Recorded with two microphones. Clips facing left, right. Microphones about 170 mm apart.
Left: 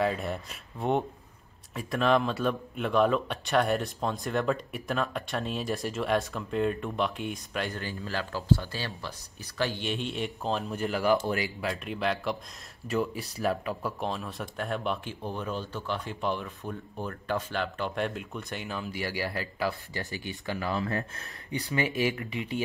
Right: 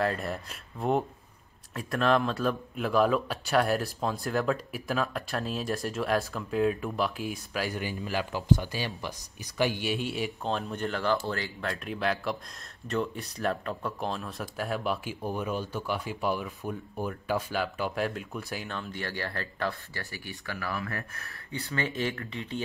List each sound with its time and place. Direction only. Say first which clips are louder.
0.0 s speech: left 1 dB; centre (ahead or behind)
11.7 s speech: right 2 dB; centre (ahead or behind)